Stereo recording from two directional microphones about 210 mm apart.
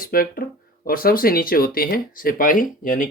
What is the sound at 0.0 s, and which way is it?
Speech, 45° left (ahead or behind).